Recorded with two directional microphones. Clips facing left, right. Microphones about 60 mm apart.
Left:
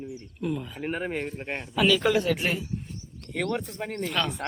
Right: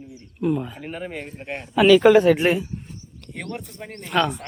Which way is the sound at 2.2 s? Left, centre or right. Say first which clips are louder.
Right 9 dB; right.